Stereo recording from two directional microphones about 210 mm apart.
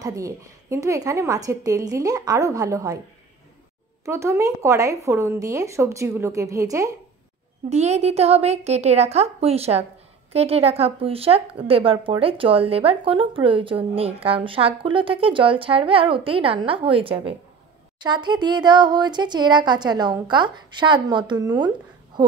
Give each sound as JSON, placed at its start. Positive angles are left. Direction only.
{"t": 0.0, "sound": "a woman's voice", "side_deg": -15}
{"t": 4.0, "sound": "a woman's voice", "side_deg": -15}
{"t": 7.7, "sound": "a woman's voice", "side_deg": -30}